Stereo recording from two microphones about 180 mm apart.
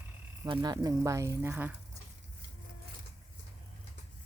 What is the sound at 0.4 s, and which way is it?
Speech, 25° right (ahead or behind).